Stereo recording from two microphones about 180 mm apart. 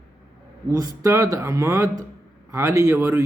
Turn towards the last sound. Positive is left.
turn(degrees=-15)  # may be behind; listen again after turning